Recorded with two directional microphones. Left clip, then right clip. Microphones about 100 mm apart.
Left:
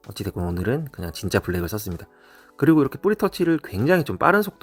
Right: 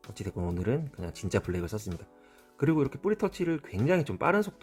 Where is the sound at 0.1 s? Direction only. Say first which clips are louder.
Left 7 dB; 25° left (ahead or behind).